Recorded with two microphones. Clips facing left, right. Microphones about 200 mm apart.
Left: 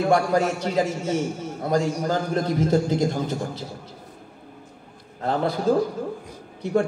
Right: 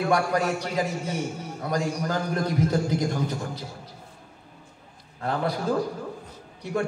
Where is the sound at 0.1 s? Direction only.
25° left (ahead or behind).